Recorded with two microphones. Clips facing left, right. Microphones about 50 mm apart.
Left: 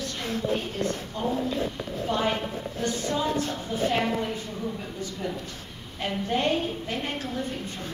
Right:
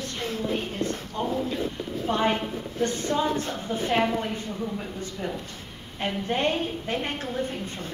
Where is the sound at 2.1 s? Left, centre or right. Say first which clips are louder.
Right 2 dB; right.